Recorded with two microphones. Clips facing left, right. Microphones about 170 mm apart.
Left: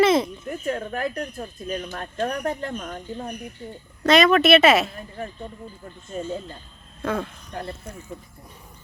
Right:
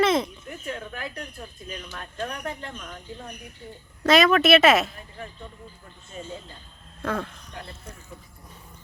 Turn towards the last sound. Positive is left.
turn(degrees=45)  # may be behind; listen again after turning